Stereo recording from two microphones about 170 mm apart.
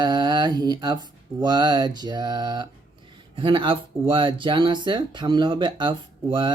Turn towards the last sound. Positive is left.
turn(degrees=-30)  # may be behind; listen again after turning